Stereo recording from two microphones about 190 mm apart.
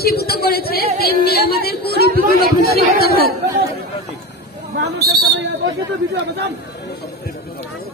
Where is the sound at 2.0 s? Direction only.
55° right (ahead or behind).